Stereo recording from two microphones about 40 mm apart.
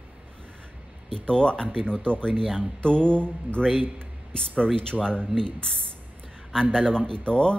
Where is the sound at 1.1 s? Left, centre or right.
Left.